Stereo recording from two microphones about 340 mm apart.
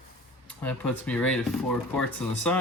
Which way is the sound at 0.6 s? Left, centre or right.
Centre.